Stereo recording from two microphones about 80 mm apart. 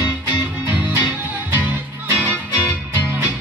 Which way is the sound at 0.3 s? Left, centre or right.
Right.